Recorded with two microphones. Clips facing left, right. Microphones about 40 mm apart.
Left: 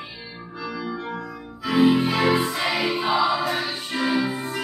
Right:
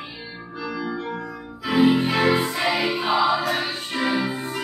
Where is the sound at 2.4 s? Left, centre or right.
Centre.